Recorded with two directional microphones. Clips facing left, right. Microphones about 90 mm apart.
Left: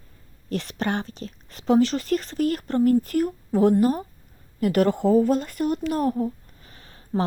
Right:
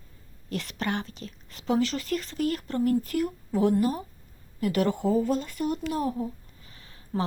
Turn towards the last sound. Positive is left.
turn(degrees=40)  # may be behind; listen again after turning